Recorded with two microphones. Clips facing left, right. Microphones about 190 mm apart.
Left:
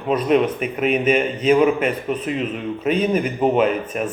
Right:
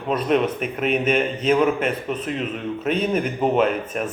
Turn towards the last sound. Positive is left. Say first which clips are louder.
# left 2 dB
turn(degrees=5)  # may be behind; listen again after turning